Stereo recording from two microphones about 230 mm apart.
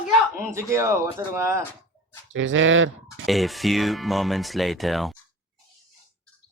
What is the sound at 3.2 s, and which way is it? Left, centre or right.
Speech, centre.